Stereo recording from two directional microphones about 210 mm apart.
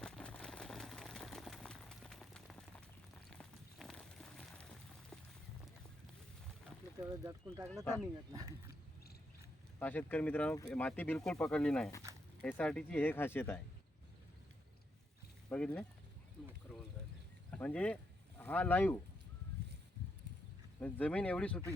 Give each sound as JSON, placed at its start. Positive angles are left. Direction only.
{"t": 0.0, "sound": "a sound", "side_deg": 5}
{"t": 7.0, "sound": "speech", "side_deg": -15}
{"t": 9.8, "sound": "speech", "side_deg": 10}
{"t": 15.4, "sound": "speech", "side_deg": 5}
{"t": 17.5, "sound": "a sound", "side_deg": 5}
{"t": 20.8, "sound": "speech", "side_deg": 5}